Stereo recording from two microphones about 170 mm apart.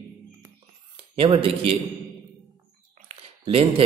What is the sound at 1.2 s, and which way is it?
Speech, 35° right (ahead or behind).